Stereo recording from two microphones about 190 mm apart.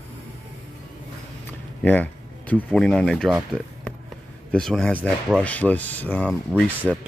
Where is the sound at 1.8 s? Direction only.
10° left (ahead or behind).